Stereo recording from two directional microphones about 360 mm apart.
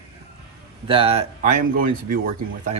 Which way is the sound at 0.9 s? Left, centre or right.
Centre.